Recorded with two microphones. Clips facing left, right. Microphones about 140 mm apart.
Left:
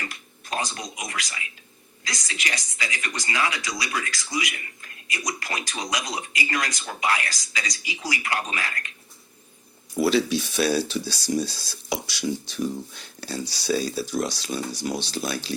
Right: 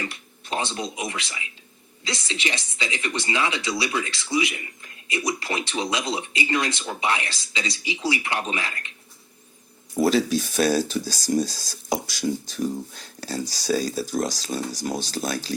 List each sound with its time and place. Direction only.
0.1 s speech: 25° right (ahead or behind)
10.0 s speech: 45° right (ahead or behind)